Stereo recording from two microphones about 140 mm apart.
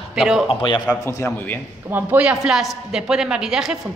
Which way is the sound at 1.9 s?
10° right (ahead or behind).